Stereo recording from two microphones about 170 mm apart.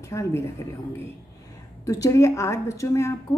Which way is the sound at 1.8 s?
20° left (ahead or behind).